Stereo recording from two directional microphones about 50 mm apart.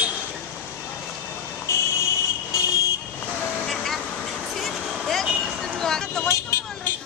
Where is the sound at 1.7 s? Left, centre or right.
Left.